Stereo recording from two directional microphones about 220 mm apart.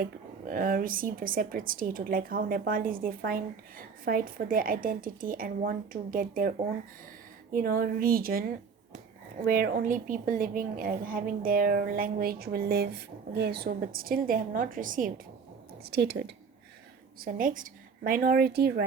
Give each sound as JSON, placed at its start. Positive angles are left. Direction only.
{"t": 0.0, "sound": "speech", "side_deg": -40}
{"t": 7.5, "sound": "speech", "side_deg": -40}
{"t": 15.9, "sound": "a woman's voice", "side_deg": -50}
{"t": 17.2, "sound": "speech", "side_deg": -40}